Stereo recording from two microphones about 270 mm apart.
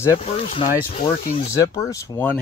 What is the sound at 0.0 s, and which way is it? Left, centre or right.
Speech, centre.